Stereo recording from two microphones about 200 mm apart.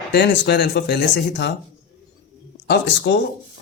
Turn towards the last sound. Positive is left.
turn(degrees=60)  # may be behind; listen again after turning